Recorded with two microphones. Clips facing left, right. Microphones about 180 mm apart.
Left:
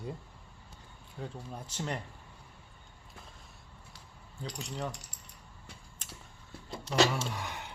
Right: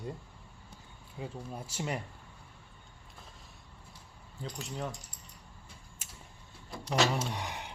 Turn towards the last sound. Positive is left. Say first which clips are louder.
# right 1 dB
turn(degrees=-20)  # may be behind; listen again after turning